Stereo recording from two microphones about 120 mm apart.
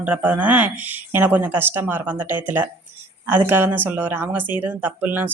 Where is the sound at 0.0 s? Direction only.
10° right (ahead or behind).